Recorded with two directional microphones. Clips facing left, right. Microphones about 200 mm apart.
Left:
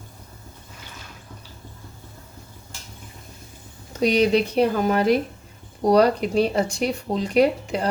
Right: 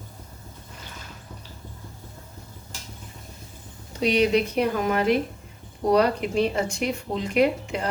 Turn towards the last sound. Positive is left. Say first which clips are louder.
# left 3 dB
turn(degrees=35)  # may be behind; listen again after turning